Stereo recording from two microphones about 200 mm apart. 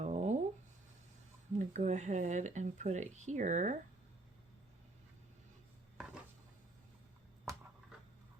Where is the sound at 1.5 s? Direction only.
35° right (ahead or behind).